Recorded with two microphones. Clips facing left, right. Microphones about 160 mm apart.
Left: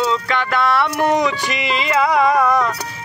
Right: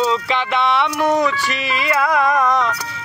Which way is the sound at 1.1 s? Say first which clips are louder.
Even; 15° left (ahead or behind).